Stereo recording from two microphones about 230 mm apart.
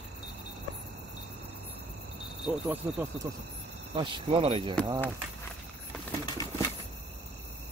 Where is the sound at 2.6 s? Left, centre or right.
Centre.